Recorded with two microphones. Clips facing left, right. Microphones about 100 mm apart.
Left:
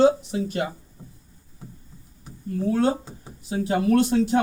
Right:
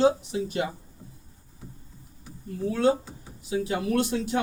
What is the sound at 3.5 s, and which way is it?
Speech, 40° left (ahead or behind).